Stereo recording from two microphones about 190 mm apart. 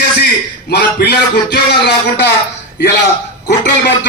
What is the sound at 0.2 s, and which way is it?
A man's voice, 55° left (ahead or behind).